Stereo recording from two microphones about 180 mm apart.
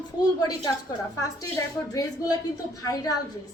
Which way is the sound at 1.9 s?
20° left (ahead or behind).